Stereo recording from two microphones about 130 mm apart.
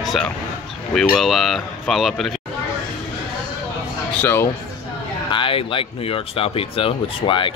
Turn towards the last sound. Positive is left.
turn(degrees=40)  # may be behind; listen again after turning